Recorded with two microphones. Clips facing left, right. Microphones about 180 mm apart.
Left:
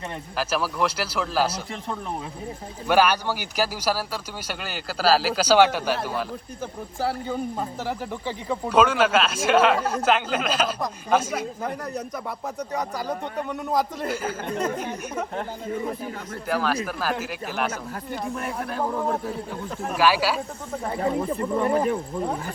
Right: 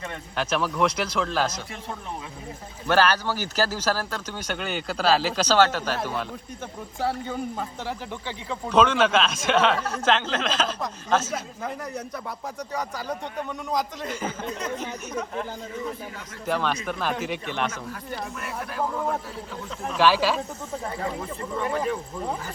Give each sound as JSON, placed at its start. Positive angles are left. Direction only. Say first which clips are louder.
{"t": 0.3, "sound": "speech", "louder": "right 1 dB", "side_deg": 5}
{"t": 2.8, "sound": "speech", "louder": "left 1 dB", "side_deg": 10}
{"t": 14.1, "sound": "speech", "louder": "left 3 dB", "side_deg": 10}
{"t": 16.5, "sound": "speech", "louder": "left 1 dB", "side_deg": 5}
{"t": 20.0, "sound": "speech", "louder": "right 1 dB", "side_deg": 10}
{"t": 20.9, "sound": "speech", "louder": "left 6 dB", "side_deg": 30}